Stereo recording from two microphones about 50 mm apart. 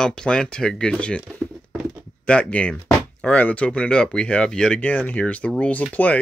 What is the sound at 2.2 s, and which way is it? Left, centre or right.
Speech, left.